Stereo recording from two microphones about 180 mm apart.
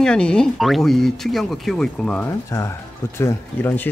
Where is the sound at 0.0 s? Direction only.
5° left (ahead or behind).